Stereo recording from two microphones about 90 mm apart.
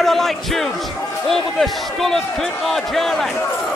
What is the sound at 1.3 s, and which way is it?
Speech, centre (ahead or behind).